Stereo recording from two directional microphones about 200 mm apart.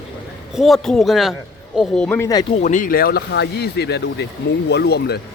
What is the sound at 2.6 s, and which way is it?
Speech, 40° left (ahead or behind).